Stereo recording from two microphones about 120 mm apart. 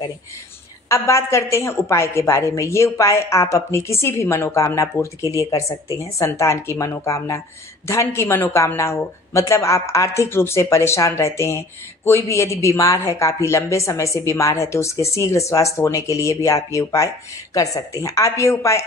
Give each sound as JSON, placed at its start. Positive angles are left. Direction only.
{"t": 0.8, "sound": "speech", "side_deg": 25}